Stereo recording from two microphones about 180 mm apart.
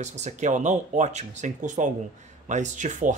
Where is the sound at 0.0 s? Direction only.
40° right (ahead or behind).